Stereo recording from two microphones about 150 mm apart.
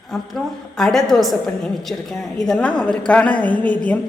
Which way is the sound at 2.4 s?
5° left (ahead or behind).